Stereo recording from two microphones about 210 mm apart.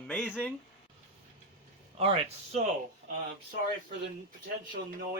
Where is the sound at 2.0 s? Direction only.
30° right (ahead or behind).